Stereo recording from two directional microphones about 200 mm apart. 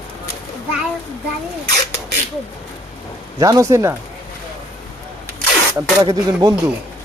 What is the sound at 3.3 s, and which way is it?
Speech, 15° right (ahead or behind).